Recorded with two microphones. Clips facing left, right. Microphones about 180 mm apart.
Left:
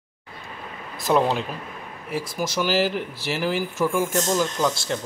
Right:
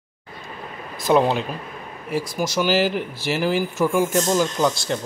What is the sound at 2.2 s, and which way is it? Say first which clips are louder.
Speech: right 3 dB; 30° left (ahead or behind).